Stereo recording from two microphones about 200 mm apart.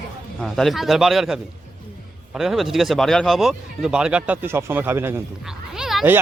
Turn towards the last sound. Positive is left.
turn(degrees=-5)  # may be behind; listen again after turning